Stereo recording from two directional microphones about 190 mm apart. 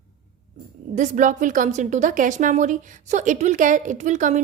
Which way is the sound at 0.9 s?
40° right (ahead or behind).